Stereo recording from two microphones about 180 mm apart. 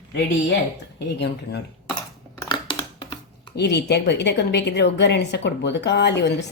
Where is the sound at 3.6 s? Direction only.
70° left (ahead or behind).